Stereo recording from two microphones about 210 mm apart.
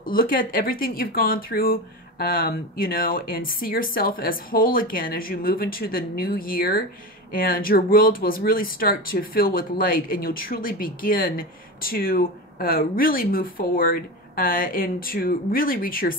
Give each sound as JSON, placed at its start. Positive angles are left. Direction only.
{"t": 0.0, "sound": "speech", "side_deg": 45}